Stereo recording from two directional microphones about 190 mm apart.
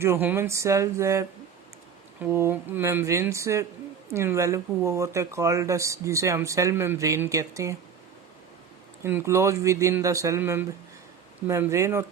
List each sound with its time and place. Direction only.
0.0 s speech: 10° right (ahead or behind)
2.3 s speech: 10° right (ahead or behind)
9.0 s speech: 15° right (ahead or behind)